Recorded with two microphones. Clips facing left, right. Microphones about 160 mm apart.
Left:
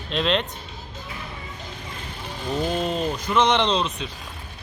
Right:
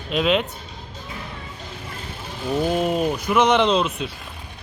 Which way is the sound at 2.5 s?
10° right (ahead or behind).